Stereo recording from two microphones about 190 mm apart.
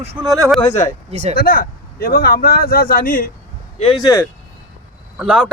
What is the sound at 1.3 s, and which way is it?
Speech, 50° left (ahead or behind).